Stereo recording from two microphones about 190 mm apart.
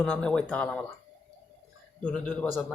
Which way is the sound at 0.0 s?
5° left (ahead or behind).